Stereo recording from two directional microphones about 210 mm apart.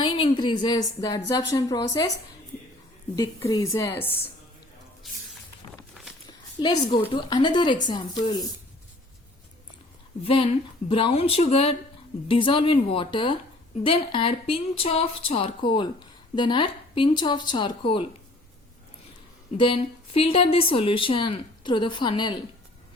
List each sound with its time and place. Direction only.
0.0 s speech: 25° left (ahead or behind)
3.2 s a woman's voice: 15° left (ahead or behind)
5.0 s a sound: centre (ahead or behind)
6.2 s a sound: 20° left (ahead or behind)
7.1 s speech: 20° left (ahead or behind)
10.2 s speech: 25° left (ahead or behind)
19.5 s speech: 25° left (ahead or behind)